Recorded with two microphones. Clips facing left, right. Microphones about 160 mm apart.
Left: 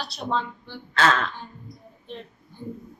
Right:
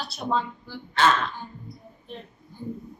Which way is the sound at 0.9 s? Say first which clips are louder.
Even; 90° left.